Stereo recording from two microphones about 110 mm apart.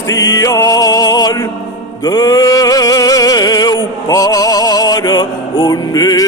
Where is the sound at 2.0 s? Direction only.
35° left (ahead or behind).